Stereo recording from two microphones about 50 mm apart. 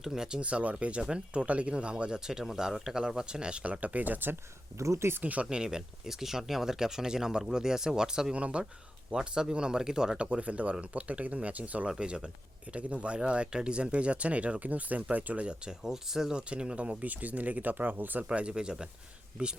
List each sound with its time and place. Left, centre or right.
0.0 s speech: centre; by 4.4 s right
4.8 s speech: right
5.2 s speech: right
5.5 s speech: centre
8.4 s speech: right
10.3 s speech: right
11.9 s speech: centre
15.4 s speech: centre
16.5 s speech: right
18.2 s speech: right